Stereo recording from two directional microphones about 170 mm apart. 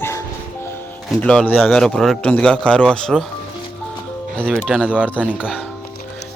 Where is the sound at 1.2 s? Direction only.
5° left (ahead or behind).